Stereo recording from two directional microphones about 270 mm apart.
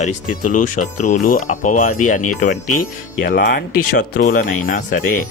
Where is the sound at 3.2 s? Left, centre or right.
Left.